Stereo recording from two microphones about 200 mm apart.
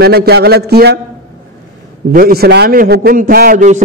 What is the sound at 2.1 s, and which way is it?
A man's voice, 50° right (ahead or behind).